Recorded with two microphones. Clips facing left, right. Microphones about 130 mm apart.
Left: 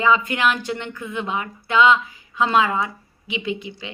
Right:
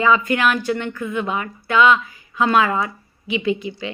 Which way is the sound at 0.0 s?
15° left (ahead or behind).